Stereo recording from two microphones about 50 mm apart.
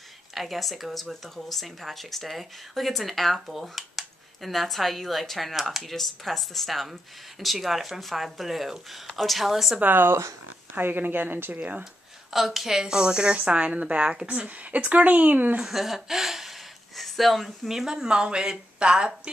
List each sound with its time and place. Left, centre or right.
0.3 s speech: centre
9.8 s a woman's voice: right
12.3 s a woman's voice: centre; by 15.6 s right
15.6 s speech: centre